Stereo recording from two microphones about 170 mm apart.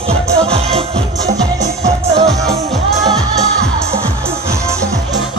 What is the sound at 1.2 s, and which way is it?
Music, 20° right (ahead or behind).